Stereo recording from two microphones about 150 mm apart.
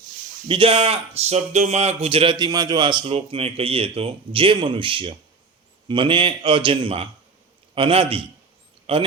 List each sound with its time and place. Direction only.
0.4 s speech: 35° right (ahead or behind)